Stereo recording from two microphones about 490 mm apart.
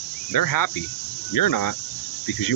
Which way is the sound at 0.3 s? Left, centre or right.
Left.